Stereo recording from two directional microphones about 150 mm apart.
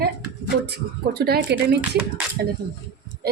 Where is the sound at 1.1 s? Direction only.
90° right.